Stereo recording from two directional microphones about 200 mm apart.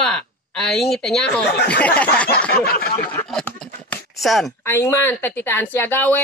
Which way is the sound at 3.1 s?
5° left (ahead or behind).